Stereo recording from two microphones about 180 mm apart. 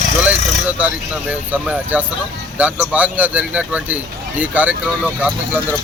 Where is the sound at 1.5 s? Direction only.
10° right (ahead or behind).